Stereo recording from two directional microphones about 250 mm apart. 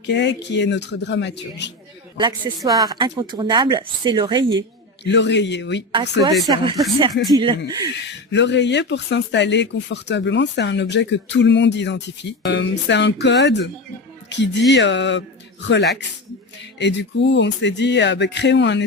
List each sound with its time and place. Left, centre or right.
0.0 s speech: left
2.1 s speech: centre
5.0 s speech: left
5.9 s speech: centre
8.0 s speech: left
16.7 s speech: left